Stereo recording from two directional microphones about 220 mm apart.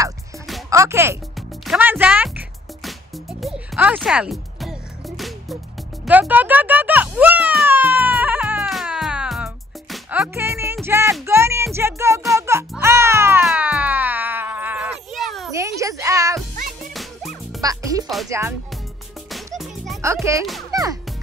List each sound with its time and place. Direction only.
0.7 s speech: 15° right (ahead or behind)
1.7 s music: 10° right (ahead or behind)
6.0 s a sound: 5° right (ahead or behind)
11.2 s music: 10° right (ahead or behind)
15.5 s a sound: 15° right (ahead or behind)
16.5 s music: 40° right (ahead or behind)
16.9 s music: centre (ahead or behind)
17.6 s music: 15° right (ahead or behind)
19.3 s music: centre (ahead or behind)
20.7 s music: 15° right (ahead or behind)